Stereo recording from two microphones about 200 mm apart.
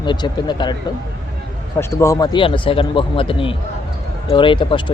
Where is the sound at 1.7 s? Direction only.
15° left (ahead or behind).